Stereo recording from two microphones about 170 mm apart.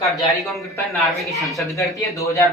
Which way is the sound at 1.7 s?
20° left (ahead or behind).